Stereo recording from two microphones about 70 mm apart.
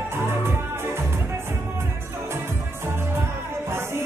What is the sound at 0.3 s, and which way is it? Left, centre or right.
Music, right.